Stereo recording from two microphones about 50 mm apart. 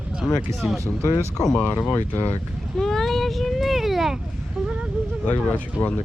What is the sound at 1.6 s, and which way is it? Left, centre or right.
Speech, left.